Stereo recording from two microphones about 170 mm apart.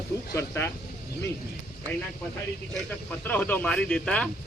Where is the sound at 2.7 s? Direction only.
10° left (ahead or behind).